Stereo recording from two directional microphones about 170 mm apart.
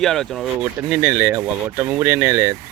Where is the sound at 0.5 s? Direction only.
10° right (ahead or behind).